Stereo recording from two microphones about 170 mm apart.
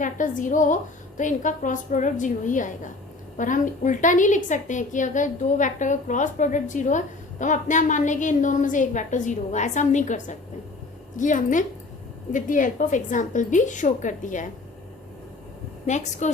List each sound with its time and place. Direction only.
0.0 s a woman's voice: 50° left (ahead or behind)
16.2 s a woman's voice: 45° left (ahead or behind)